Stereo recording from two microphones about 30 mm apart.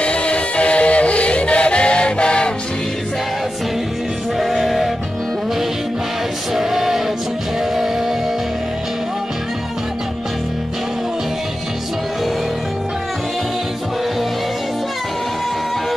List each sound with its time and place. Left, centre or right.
0.0 s music: left
4.4 s music: centre
6.5 s a sound: centre